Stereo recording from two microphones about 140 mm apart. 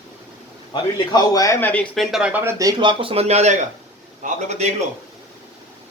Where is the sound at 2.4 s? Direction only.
20° right (ahead or behind).